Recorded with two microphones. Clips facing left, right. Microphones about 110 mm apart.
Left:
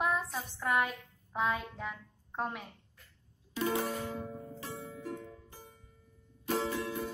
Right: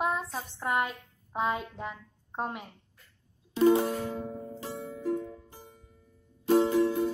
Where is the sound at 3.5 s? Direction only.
30° right (ahead or behind).